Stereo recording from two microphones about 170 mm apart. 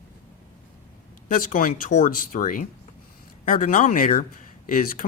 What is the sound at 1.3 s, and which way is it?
Speech, 50° left (ahead or behind).